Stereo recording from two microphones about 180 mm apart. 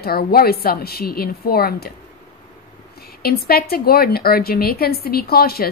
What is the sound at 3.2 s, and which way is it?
A woman's voice, 60° left (ahead or behind).